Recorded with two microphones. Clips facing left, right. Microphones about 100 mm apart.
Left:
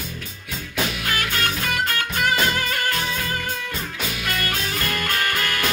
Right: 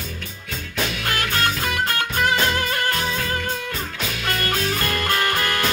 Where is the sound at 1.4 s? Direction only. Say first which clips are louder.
Right 1 dB; 30° right (ahead or behind).